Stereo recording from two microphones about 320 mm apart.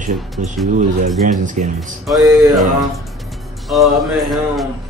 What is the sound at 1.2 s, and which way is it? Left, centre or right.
Speech, right.